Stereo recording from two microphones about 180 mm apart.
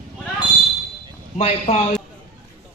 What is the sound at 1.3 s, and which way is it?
Speech, 35° left (ahead or behind).